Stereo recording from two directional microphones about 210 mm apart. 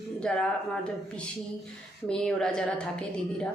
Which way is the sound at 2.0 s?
5° left (ahead or behind).